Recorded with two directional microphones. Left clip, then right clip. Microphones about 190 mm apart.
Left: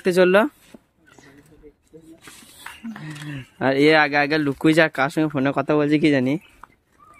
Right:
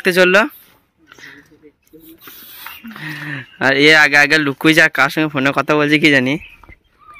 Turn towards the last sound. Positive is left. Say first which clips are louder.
# right 6 dB
turn(degrees=0)  # may be behind; listen again after turning